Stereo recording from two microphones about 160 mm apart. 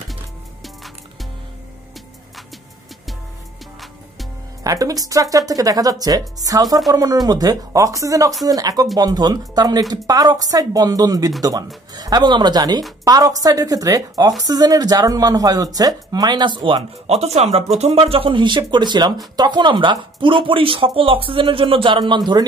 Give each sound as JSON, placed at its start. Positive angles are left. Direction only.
{"t": 4.6, "sound": "speech", "side_deg": -20}